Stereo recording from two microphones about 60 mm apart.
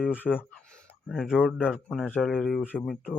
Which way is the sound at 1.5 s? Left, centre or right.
Centre.